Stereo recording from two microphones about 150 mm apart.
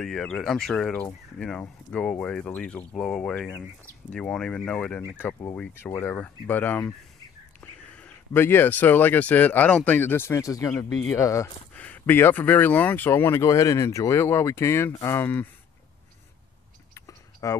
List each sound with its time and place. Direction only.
0.0 s speech: 5° left (ahead or behind)
5.0 s speech: 15° left (ahead or behind)
11.7 s speech: 10° left (ahead or behind)
16.9 s a sound: 20° left (ahead or behind)